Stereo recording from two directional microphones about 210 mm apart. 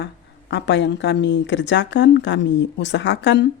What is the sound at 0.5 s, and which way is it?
Speech, 55° left (ahead or behind).